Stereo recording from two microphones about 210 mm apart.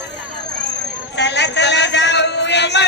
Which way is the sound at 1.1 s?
55° left (ahead or behind).